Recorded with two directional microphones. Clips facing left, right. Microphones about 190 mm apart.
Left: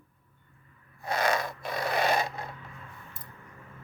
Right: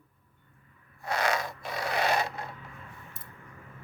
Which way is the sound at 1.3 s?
55° left (ahead or behind).